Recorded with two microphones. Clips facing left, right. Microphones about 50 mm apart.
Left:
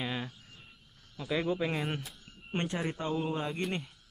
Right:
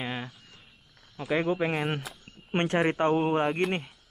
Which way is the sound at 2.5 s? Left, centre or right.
Right.